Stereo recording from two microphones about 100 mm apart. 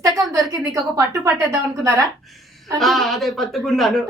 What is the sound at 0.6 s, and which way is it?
A woman's voice, 30° right (ahead or behind).